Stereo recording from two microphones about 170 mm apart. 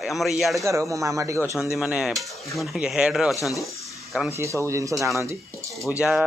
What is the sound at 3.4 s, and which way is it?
Speech, 20° left (ahead or behind).